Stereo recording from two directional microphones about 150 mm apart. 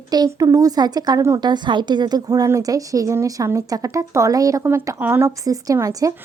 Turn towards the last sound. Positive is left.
turn(degrees=-25)  # may be behind; listen again after turning